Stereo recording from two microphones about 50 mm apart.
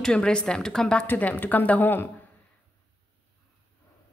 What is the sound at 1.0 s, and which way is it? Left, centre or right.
Speech, left.